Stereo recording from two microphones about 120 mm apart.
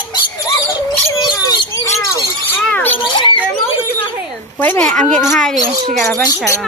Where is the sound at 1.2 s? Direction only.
35° left (ahead or behind).